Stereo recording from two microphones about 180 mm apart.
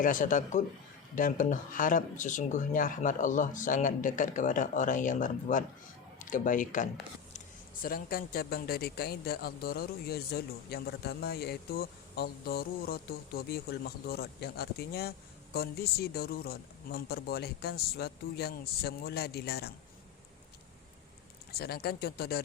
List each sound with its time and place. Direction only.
0.0 s speech: 45° left (ahead or behind); by 19.7 s 60° left (ahead or behind)
21.6 s speech: 60° left (ahead or behind)